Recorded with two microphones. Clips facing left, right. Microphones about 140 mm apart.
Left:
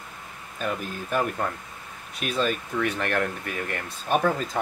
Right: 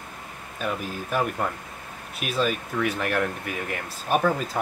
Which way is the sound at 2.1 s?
5° right (ahead or behind).